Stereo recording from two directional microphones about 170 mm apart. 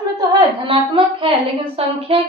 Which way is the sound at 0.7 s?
30° right (ahead or behind).